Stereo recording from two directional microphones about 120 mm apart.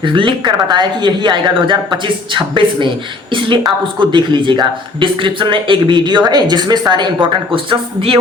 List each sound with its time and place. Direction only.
0.0 s a man's voice: 45° right (ahead or behind)